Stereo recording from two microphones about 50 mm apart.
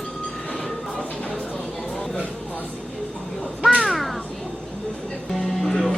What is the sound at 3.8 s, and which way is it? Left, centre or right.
Crow, centre.